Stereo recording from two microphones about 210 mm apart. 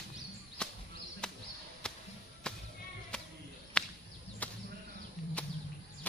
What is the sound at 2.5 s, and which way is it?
Music, 5° left (ahead or behind).